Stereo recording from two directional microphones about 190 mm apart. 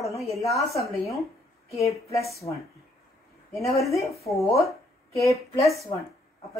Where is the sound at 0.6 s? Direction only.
Centre (ahead or behind).